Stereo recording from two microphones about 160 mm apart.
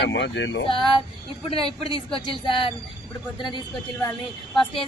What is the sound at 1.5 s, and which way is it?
A woman's voice, 35° left (ahead or behind).